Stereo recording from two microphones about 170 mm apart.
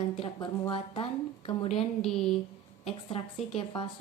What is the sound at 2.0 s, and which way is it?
Speech, centre (ahead or behind).